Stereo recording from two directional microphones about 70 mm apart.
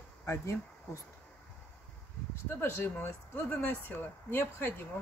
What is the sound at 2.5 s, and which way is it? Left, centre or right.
Speech, left.